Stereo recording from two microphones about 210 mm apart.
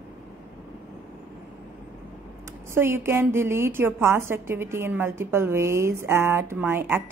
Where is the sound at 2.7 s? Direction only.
10° right (ahead or behind).